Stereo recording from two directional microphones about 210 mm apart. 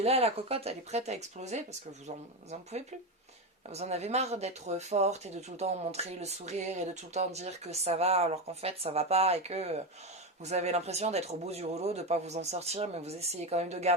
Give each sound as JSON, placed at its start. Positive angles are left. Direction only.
{"t": 0.0, "sound": "speech", "side_deg": -30}
{"t": 3.7, "sound": "speech", "side_deg": -30}